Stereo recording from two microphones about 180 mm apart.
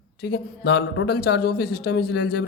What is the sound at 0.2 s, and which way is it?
A man's voice, 65° left (ahead or behind).